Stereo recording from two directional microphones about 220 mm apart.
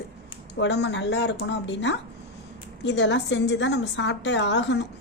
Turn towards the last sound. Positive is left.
turn(degrees=50)  # may be behind; listen again after turning